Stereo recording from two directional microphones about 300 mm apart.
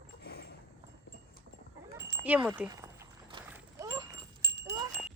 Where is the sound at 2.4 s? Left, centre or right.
Centre.